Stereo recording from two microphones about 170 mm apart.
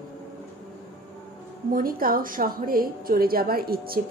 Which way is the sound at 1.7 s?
60° right (ahead or behind).